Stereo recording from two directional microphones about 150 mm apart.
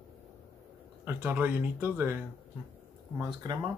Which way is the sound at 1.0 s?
15° right (ahead or behind).